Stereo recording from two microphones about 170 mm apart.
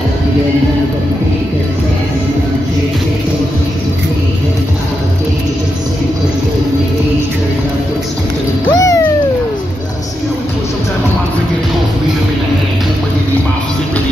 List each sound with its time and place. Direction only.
8.7 s music: 20° left (ahead or behind)